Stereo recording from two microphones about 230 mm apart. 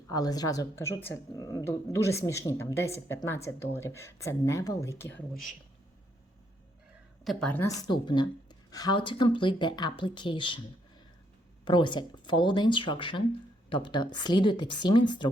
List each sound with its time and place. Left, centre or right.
0.1 s speech: centre
7.3 s a woman's voice: centre; by 10.6 s left
11.6 s a woman's voice: centre